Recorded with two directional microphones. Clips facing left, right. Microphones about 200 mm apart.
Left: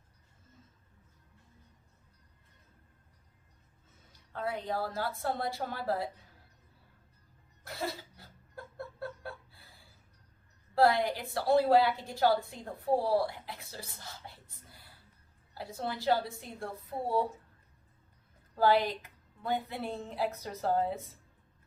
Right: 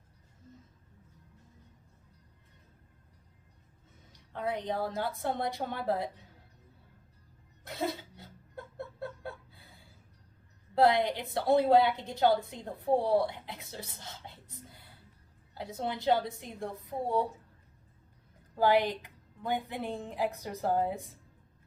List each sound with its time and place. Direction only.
4.1 s a woman's voice: 20° right (ahead or behind)
7.6 s chuckle: 20° right (ahead or behind)
10.8 s a woman's voice: 20° right (ahead or behind)
18.5 s a woman's voice: 15° right (ahead or behind)